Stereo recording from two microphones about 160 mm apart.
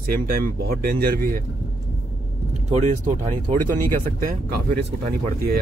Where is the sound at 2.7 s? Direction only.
50° right (ahead or behind).